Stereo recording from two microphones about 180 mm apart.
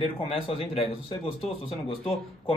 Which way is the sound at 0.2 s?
30° left (ahead or behind).